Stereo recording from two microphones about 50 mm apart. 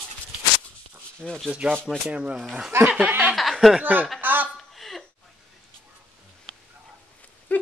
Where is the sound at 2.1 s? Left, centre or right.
Right.